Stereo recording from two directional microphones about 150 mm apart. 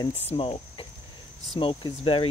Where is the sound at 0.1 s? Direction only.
45° left (ahead or behind).